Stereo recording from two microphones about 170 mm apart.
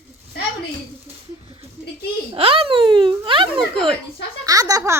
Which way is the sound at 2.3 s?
35° right (ahead or behind).